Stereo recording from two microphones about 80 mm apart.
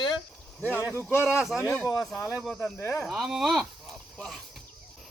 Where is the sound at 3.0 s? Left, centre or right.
Centre.